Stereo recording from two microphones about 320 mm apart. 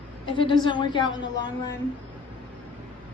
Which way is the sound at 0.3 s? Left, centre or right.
Centre.